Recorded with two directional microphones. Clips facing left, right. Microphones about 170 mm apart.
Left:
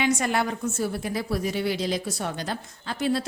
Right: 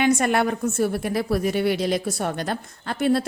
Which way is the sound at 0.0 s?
55° right (ahead or behind).